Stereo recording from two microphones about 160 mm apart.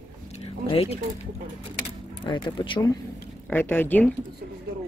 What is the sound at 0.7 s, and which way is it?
Speech, 35° left (ahead or behind).